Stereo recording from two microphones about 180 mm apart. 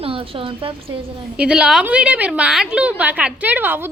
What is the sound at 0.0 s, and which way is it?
Speech, 30° right (ahead or behind).